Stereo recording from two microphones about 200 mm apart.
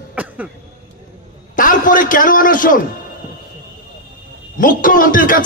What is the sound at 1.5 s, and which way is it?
A man's voice, 45° left (ahead or behind).